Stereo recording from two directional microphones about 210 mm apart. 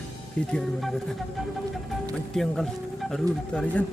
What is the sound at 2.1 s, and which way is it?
Speech, centre (ahead or behind).